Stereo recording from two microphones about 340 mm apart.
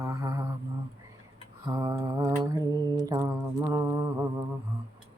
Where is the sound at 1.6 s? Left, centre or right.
Centre.